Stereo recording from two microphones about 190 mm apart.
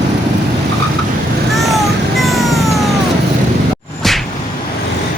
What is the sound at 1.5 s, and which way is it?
Vehicle, centre (ahead or behind).